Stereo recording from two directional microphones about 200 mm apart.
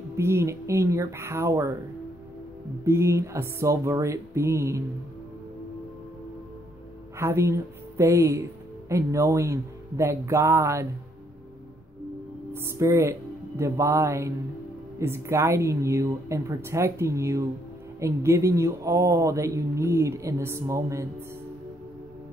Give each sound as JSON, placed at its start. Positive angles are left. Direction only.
{"t": 0.1, "sound": "speech", "side_deg": -15}
{"t": 2.8, "sound": "speech", "side_deg": -15}
{"t": 7.2, "sound": "speech", "side_deg": -15}
{"t": 12.6, "sound": "speech", "side_deg": -15}